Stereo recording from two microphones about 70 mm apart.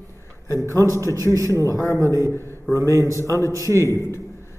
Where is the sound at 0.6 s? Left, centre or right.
Right.